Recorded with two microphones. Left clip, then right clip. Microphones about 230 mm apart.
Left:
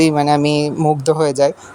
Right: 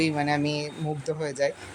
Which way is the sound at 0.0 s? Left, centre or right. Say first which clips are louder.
Left 12 dB; left.